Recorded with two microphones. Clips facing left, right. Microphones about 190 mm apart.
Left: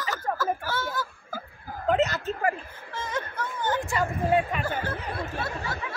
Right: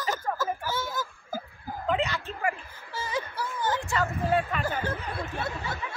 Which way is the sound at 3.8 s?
15° left (ahead or behind).